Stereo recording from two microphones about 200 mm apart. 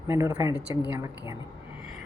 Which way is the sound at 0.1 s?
15° right (ahead or behind).